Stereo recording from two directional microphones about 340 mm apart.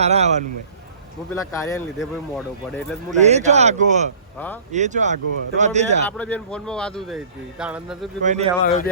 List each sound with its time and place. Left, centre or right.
0.0 s a man's voice: centre
1.3 s speech: centre
3.1 s a man's voice: centre
6.1 s speech: centre
8.2 s a man's voice: centre
8.6 s speech: left